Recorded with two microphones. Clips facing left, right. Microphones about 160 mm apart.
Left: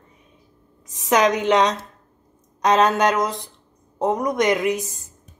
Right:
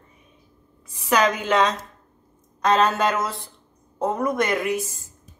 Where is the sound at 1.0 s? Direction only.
20° left (ahead or behind).